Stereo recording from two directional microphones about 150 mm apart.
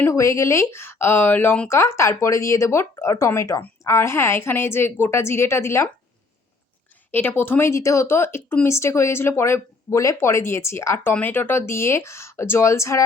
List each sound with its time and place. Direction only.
0.0 s speech: 20° left (ahead or behind)
7.1 s speech: 15° left (ahead or behind)